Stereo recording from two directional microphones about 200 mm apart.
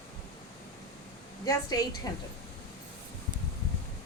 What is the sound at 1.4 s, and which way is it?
Speech, 20° left (ahead or behind).